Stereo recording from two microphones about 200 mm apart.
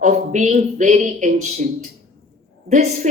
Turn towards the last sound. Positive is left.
turn(degrees=-35)  # may be behind; listen again after turning